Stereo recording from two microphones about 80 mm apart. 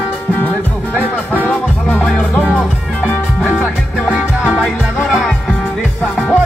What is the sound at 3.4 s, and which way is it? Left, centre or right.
Music, centre.